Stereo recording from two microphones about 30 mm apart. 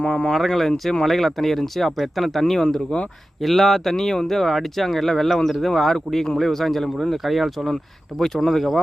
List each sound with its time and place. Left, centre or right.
0.0 s speech: left
0.3 s speech: centre
2.4 s speech: centre
2.9 s speech: left
3.4 s speech: centre
7.2 s speech: centre
8.2 s speech: centre